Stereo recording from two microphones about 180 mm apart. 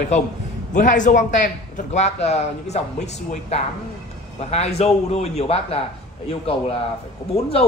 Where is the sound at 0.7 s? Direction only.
45° left (ahead or behind).